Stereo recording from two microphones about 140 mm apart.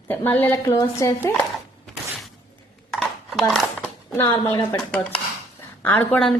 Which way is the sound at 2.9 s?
Centre (ahead or behind).